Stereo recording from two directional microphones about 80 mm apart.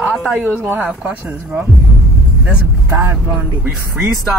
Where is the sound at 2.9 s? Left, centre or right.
Right.